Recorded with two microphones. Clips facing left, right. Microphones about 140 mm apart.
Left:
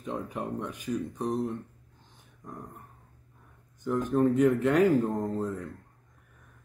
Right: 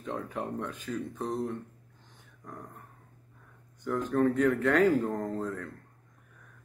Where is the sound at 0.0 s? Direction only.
15° left (ahead or behind).